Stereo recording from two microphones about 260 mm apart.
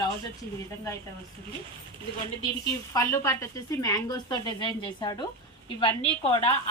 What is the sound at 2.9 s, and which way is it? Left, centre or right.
A woman's voice, centre.